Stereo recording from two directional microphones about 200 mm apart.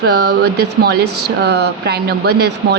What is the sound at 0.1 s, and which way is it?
A woman's voice, 50° right (ahead or behind).